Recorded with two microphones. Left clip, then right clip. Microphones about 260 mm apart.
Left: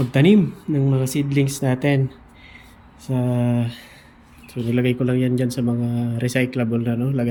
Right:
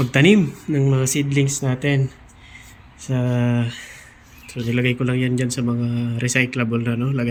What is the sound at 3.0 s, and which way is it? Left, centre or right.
A man's voice, centre.